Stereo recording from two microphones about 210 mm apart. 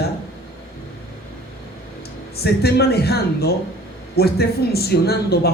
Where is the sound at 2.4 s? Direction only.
50° left (ahead or behind).